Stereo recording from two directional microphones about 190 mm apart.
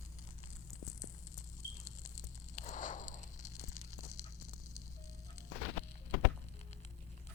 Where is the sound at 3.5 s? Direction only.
15° left (ahead or behind).